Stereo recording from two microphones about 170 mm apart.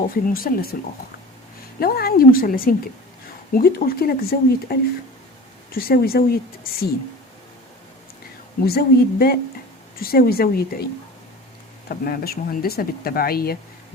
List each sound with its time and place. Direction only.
0.1 s speech: 60° left (ahead or behind)
1.8 s speech: 65° left (ahead or behind)
8.6 s speech: 65° left (ahead or behind)
11.9 s speech: 60° left (ahead or behind)